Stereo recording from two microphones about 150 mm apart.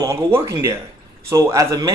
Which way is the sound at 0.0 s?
20° right (ahead or behind).